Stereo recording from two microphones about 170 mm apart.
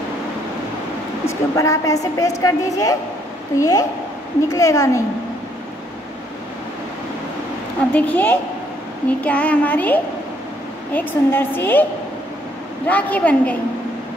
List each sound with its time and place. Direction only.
1.2 s a woman's voice: 20° left (ahead or behind)
7.9 s a woman's voice: 10° left (ahead or behind)
12.8 s a woman's voice: 10° left (ahead or behind)